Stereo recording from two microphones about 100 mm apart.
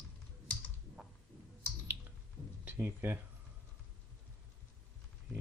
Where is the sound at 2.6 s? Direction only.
20° right (ahead or behind).